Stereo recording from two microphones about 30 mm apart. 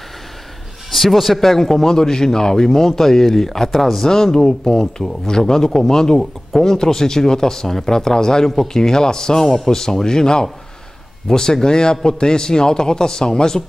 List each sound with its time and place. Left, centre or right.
0.9 s a man's voice: centre
4.1 s a man's voice: centre